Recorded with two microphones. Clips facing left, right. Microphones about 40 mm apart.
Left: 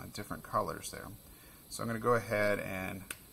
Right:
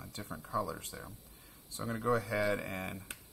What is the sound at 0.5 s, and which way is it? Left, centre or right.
Speech, left.